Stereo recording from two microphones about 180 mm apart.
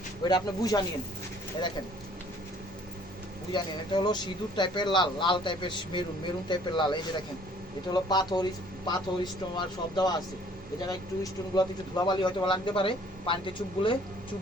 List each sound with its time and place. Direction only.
0.3 s speech: 20° left (ahead or behind)
3.5 s speech: 25° left (ahead or behind)